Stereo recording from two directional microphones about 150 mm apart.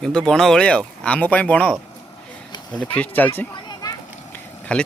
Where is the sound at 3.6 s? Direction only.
25° left (ahead or behind).